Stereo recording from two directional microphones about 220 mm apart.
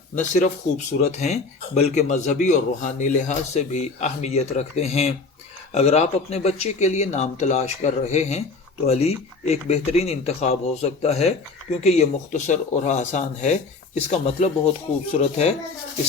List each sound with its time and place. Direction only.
0.2 s speech: 35° left (ahead or behind)